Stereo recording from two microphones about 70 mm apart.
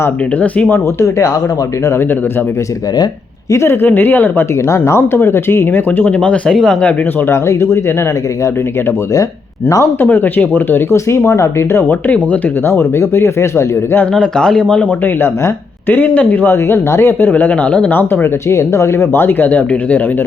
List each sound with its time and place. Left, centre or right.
0.4 s speech: left
0.9 s speech: left
3.5 s speech: left
3.8 s speech: left
4.7 s speech: left
6.1 s speech: centre
7.3 s speech: left
10.0 s speech: left
10.9 s speech: left
12.6 s speech: left
14.1 s speech: centre
15.0 s speech: left
18.1 s speech: left